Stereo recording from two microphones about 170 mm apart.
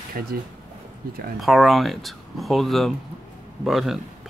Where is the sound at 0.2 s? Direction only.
60° right (ahead or behind).